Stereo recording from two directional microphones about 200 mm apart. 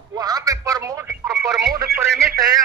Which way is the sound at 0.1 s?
20° right (ahead or behind).